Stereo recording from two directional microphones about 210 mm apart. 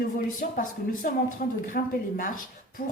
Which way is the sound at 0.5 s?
40° left (ahead or behind).